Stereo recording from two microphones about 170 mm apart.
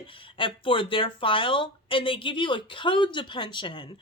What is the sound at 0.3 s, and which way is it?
Speech, 30° left (ahead or behind).